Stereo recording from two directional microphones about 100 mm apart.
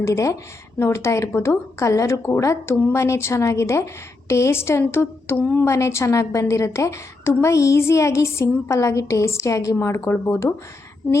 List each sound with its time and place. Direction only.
0.0 s a woman's voice: 30° left (ahead or behind)